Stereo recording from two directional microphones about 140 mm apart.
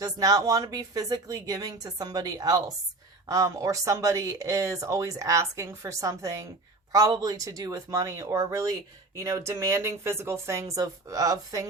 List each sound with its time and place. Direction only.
0.0 s speech: 25° right (ahead or behind)